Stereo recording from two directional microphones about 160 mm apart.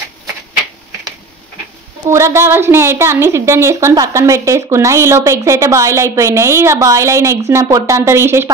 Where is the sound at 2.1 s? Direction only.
20° right (ahead or behind).